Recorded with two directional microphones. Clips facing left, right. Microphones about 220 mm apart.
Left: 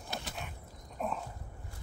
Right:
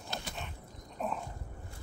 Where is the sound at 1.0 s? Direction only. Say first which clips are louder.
Even; centre (ahead or behind).